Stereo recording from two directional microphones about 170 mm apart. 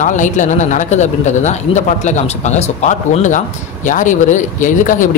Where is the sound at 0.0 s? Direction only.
45° left (ahead or behind).